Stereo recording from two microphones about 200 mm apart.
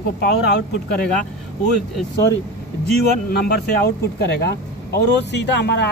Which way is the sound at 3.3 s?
55° left (ahead or behind).